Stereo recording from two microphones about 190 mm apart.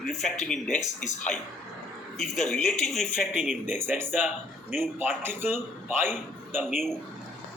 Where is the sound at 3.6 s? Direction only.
10° right (ahead or behind).